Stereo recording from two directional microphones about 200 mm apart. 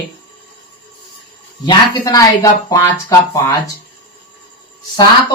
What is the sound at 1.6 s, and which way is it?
Speech, 20° left (ahead or behind).